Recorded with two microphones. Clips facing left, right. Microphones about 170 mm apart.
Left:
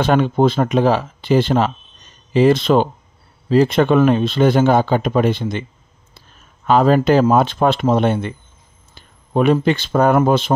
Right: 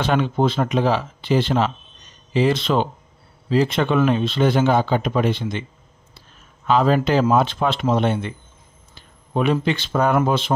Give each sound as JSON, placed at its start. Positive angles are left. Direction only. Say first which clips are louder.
{"t": 0.0, "sound": "speech", "louder": "left 5 dB", "side_deg": 45}
{"t": 6.6, "sound": "speech", "louder": "left 4 dB", "side_deg": 45}